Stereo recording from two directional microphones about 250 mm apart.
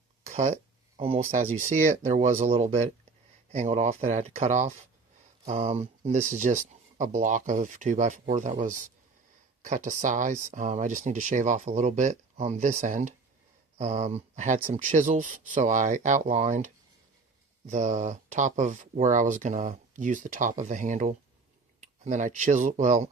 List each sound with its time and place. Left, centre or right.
0.3 s speech: right